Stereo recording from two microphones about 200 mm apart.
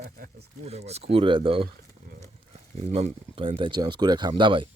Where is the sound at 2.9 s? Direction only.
30° right (ahead or behind).